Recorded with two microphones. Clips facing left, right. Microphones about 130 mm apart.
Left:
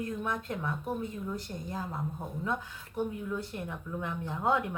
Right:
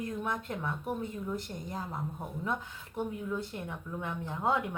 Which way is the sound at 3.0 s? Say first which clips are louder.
Left 1 dB; 20° right (ahead or behind).